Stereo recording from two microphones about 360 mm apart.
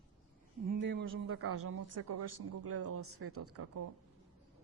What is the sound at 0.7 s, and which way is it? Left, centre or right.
Speech, right.